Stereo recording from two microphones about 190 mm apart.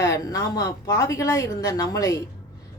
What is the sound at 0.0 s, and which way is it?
Speech, 15° left (ahead or behind).